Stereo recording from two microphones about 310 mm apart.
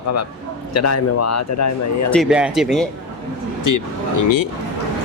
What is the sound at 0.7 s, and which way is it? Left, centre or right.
Speech, left.